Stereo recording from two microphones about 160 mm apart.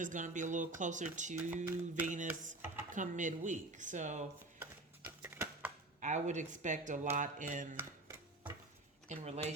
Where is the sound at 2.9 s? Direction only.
50° right (ahead or behind).